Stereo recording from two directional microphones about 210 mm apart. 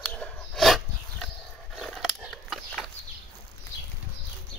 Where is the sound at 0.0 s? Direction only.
5° left (ahead or behind).